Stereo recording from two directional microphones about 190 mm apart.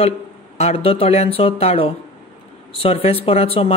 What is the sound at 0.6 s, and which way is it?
Speech, 35° left (ahead or behind).